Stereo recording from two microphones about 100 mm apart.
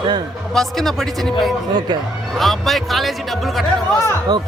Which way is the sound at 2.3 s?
Centre (ahead or behind).